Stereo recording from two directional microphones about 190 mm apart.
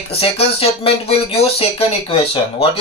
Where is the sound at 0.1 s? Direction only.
30° left (ahead or behind).